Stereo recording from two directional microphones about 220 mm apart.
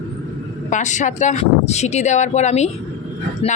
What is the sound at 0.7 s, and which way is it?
Speech, 35° left (ahead or behind).